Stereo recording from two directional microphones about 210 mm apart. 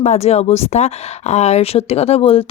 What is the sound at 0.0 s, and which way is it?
Speech, 30° left (ahead or behind).